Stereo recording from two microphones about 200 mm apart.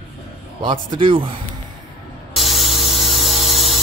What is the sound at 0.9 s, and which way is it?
Speech, 25° right (ahead or behind).